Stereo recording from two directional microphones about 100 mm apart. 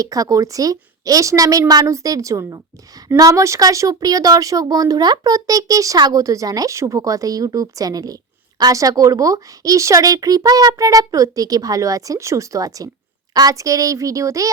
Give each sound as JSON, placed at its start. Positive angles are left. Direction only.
{"t": 0.0, "sound": "speech", "side_deg": -35}